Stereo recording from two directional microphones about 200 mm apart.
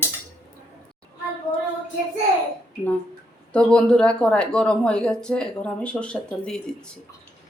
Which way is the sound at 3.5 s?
5° left (ahead or behind).